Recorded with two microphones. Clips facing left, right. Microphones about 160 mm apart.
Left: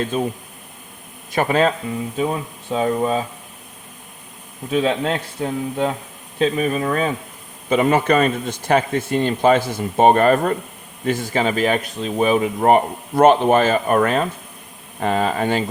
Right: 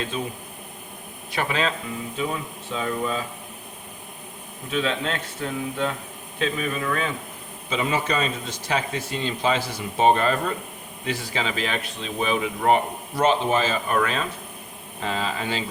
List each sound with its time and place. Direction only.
0.1 s speech: 45° left (ahead or behind)
2.7 s speech: 40° left (ahead or behind)
4.7 s speech: 35° left (ahead or behind)
7.7 s speech: 55° left (ahead or behind)